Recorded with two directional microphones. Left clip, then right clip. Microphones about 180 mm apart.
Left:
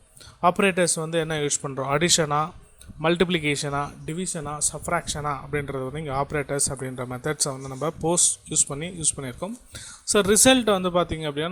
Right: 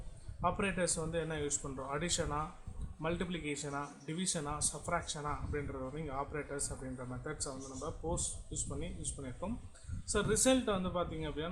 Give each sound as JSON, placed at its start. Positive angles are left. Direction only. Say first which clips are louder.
{"t": 0.4, "sound": "a man's voice", "louder": "left 14 dB", "side_deg": 40}